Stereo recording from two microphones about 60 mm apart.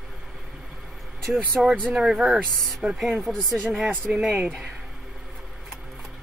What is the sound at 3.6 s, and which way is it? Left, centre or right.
Speech, centre.